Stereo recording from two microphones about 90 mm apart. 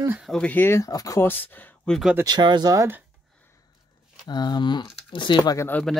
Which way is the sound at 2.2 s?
50° right (ahead or behind).